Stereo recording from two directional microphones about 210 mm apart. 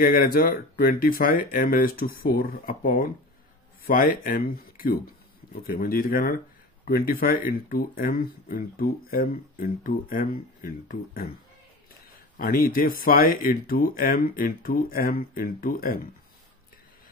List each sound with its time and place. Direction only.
0.0 s speech: 40° left (ahead or behind)